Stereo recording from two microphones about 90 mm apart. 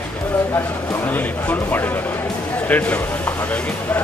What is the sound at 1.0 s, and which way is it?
Speech, 20° left (ahead or behind).